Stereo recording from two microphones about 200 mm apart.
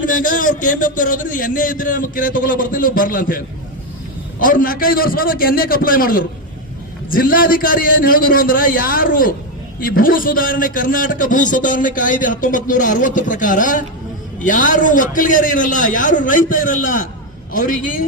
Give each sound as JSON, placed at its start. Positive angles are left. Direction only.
{"t": 0.0, "sound": "a man's voice", "side_deg": 40}